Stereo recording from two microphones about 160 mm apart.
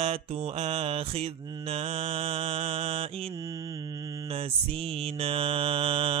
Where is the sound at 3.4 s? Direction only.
20° right (ahead or behind).